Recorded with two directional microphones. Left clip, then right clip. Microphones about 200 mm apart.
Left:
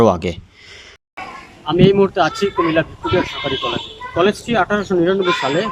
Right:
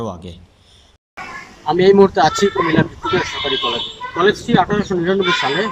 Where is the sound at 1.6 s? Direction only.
5° left (ahead or behind).